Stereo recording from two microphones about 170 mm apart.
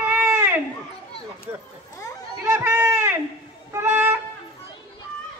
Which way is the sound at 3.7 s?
15° right (ahead or behind).